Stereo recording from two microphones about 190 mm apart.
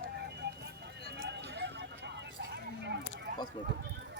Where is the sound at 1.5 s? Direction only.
65° right (ahead or behind).